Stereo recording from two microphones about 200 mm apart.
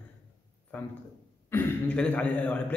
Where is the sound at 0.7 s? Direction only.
5° left (ahead or behind).